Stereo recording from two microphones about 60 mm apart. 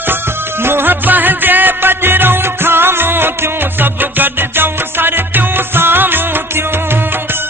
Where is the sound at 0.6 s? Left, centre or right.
Right.